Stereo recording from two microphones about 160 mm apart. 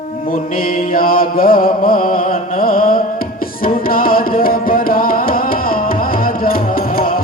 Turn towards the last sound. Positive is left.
turn(degrees=60)  # may be behind; listen again after turning